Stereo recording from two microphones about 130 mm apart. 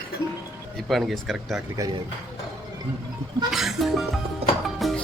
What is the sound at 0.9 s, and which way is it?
Speech, centre (ahead or behind).